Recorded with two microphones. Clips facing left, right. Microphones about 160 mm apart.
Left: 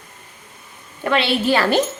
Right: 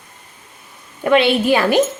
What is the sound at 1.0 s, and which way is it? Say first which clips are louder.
Speech: right 5 dB; 15° right (ahead or behind).